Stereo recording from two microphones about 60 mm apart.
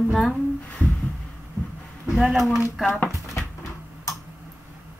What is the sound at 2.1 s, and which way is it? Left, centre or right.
Speech, centre.